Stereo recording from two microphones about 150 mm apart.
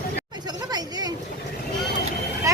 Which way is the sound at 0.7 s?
25° right (ahead or behind).